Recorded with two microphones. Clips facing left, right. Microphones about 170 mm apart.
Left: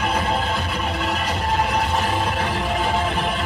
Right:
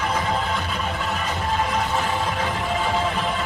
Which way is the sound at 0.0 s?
65° left (ahead or behind).